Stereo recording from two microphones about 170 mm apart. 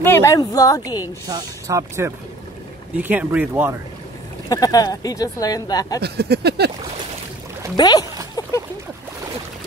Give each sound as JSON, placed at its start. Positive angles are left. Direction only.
{"t": 0.0, "sound": "speech", "side_deg": 15}
{"t": 1.2, "sound": "speech", "side_deg": -20}
{"t": 4.5, "sound": "speech", "side_deg": 20}
{"t": 5.9, "sound": "speech", "side_deg": -70}
{"t": 7.7, "sound": "speech", "side_deg": 25}
{"t": 8.4, "sound": "a sound", "side_deg": 20}